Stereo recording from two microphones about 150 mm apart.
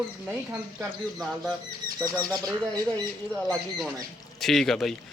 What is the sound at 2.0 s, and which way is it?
Speech, 20° right (ahead or behind).